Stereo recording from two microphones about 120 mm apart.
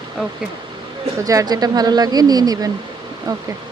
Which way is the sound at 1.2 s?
30° right (ahead or behind).